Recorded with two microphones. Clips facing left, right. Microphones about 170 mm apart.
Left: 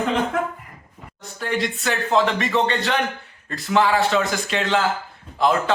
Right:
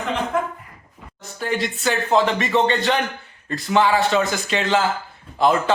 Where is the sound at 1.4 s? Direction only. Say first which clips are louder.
Even; centre (ahead or behind).